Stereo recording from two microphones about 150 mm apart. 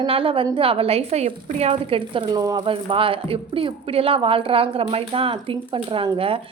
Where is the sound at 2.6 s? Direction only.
35° right (ahead or behind).